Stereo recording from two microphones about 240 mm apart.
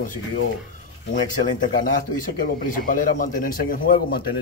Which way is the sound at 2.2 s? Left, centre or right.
Left.